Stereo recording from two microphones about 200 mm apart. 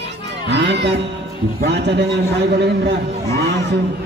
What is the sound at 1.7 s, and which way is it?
A man's voice, 60° right (ahead or behind).